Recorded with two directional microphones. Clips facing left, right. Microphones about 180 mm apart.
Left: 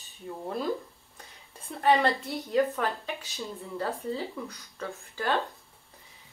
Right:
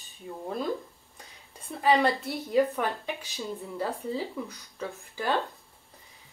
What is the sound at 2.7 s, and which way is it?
Speech, 15° right (ahead or behind).